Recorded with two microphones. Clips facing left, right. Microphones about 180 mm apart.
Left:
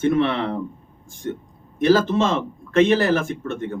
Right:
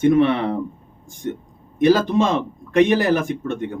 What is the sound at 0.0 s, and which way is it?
Speech, 15° right (ahead or behind).